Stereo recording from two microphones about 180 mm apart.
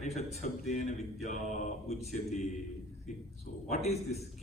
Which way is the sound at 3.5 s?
45° left (ahead or behind).